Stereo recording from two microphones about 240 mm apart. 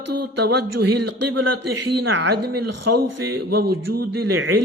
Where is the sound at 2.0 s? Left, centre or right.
Right.